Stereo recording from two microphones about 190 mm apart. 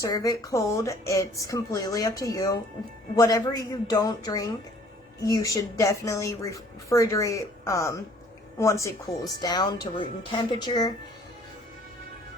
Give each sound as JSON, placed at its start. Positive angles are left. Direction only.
{"t": 0.0, "sound": "speech", "side_deg": 20}